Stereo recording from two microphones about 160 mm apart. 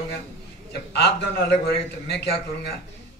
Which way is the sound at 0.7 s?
90° left.